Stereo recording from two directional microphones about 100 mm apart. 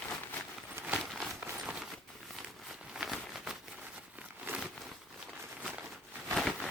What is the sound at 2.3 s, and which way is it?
Crumpling, 5° right (ahead or behind).